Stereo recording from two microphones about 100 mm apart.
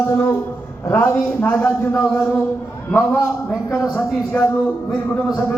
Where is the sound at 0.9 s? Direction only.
20° left (ahead or behind).